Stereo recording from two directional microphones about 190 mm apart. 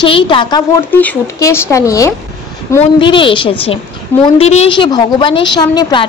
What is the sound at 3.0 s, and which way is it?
A woman's voice, 25° left (ahead or behind).